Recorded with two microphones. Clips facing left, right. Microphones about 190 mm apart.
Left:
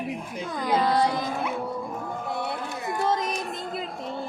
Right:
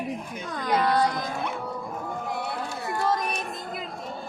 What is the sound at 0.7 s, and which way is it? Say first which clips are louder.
Speech: even; 20° left (ahead or behind).